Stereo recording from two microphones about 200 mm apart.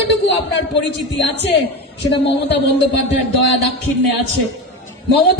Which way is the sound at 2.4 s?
60° left (ahead or behind).